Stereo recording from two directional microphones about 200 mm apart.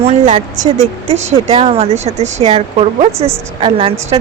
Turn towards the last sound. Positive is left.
turn(degrees=-30)  # may be behind; listen again after turning